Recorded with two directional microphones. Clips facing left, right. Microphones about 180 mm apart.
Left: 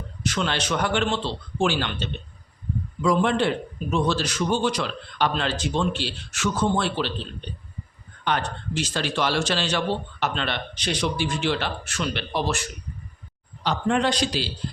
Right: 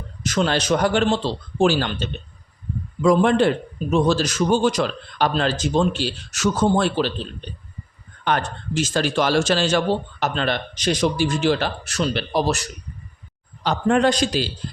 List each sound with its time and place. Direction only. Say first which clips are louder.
0.2 s a man's voice: right 5 dB; 40° right (ahead or behind)
8.2 s a man's voice: right 3 dB; 50° right (ahead or behind)
13.7 s a man's voice: right 5 dB; 45° right (ahead or behind)